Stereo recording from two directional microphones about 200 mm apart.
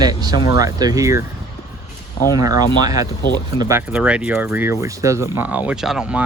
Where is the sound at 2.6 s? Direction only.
20° right (ahead or behind).